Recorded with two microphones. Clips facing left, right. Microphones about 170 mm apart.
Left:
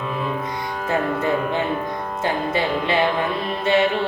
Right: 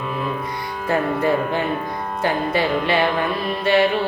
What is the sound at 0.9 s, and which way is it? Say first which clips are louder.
Speech: right 2 dB; 20° left (ahead or behind).